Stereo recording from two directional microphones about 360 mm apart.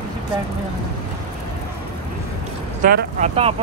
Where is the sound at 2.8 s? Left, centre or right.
Right.